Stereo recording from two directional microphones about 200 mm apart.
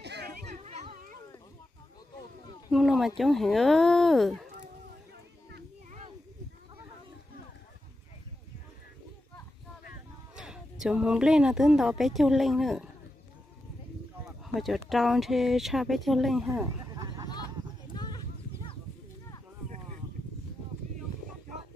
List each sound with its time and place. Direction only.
0.0 s children playing: 55° right (ahead or behind)
0.5 s children playing: 35° right (ahead or behind)
2.7 s speech: centre (ahead or behind)
10.3 s speech: 5° right (ahead or behind)
14.4 s speech: centre (ahead or behind)
16.6 s a sound: 20° right (ahead or behind)
17.9 s a sound: 20° left (ahead or behind)